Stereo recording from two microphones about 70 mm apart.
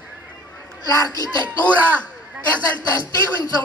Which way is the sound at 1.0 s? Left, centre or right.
Left.